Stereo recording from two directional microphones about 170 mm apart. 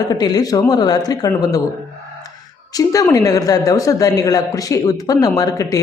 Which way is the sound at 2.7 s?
20° left (ahead or behind).